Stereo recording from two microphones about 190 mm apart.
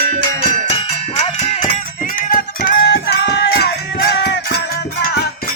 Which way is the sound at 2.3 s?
50° left (ahead or behind).